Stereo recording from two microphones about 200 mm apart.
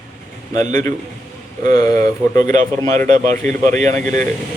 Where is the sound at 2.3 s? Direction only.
40° right (ahead or behind).